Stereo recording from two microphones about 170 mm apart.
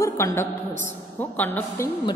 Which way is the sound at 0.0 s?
15° left (ahead or behind).